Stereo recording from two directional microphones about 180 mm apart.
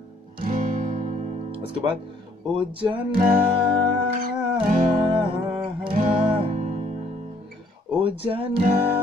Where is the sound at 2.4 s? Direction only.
25° right (ahead or behind).